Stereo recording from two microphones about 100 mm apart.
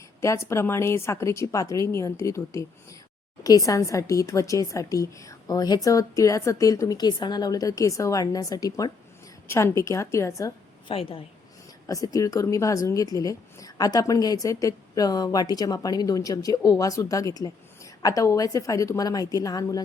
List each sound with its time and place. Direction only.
0.2 s a woman's voice: 30° left (ahead or behind)
9.5 s speech: 25° left (ahead or behind)
10.8 s a woman's voice: 65° left (ahead or behind)
11.9 s a woman's voice: 35° left (ahead or behind)